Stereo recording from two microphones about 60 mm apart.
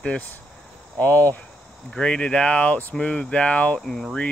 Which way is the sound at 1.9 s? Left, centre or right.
Centre.